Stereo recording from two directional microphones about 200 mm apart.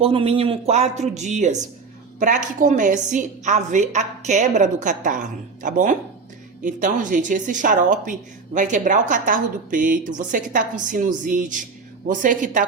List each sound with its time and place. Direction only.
0.0 s a woman's voice: 30° right (ahead or behind)